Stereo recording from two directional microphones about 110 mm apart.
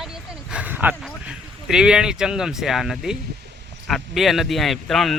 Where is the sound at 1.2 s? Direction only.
5° right (ahead or behind).